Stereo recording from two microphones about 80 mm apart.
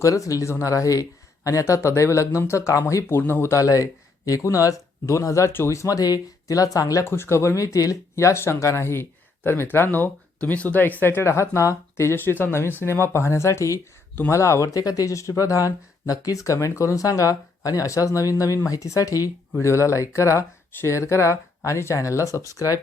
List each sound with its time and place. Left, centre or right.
0.0 s speech: left
7.0 s speech: left